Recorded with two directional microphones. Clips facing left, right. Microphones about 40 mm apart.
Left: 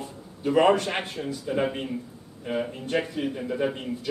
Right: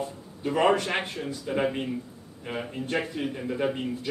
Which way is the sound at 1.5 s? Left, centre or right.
Centre.